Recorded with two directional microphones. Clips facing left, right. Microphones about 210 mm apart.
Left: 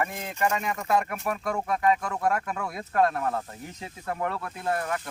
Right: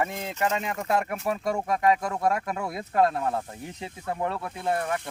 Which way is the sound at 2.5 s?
20° right (ahead or behind).